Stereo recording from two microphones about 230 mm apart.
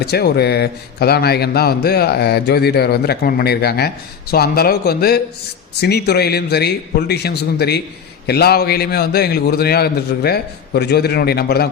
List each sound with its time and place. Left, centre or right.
0.0 s a man's voice: left